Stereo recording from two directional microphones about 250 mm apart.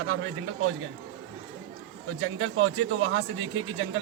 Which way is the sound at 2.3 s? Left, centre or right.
Right.